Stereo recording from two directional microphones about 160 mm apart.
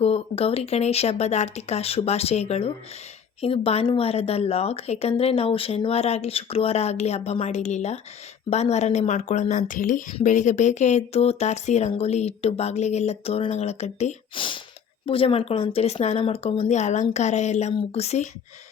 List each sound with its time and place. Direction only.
0.0 s speech: 40° left (ahead or behind)
14.3 s speech: 30° left (ahead or behind)